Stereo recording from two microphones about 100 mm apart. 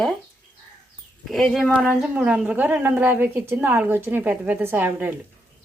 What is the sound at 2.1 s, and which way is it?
A woman's voice, 10° right (ahead or behind).